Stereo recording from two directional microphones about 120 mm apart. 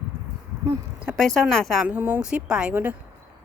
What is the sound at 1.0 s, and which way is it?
Speech, centre (ahead or behind).